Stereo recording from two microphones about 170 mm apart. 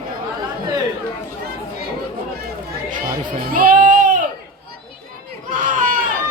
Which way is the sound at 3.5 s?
55° right (ahead or behind).